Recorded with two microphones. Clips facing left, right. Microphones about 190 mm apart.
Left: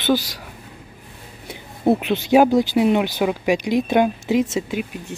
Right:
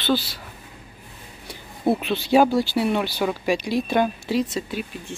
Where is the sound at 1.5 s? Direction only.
20° left (ahead or behind).